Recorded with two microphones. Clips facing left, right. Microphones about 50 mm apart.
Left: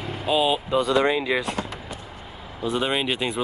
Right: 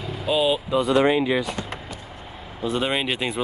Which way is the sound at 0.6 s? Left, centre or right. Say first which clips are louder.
Even; left.